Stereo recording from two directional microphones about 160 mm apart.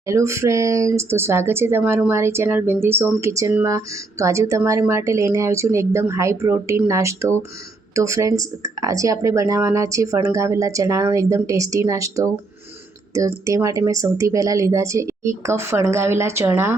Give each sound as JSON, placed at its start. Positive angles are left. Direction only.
{"t": 0.1, "sound": "speech", "side_deg": -20}